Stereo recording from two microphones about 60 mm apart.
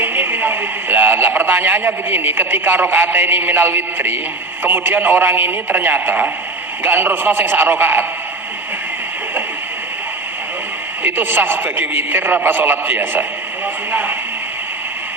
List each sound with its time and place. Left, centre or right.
0.0 s a man's voice: right
11.0 s a man's voice: right
13.9 s radio: right